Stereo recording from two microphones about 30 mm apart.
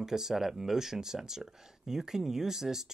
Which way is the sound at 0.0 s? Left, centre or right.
Centre.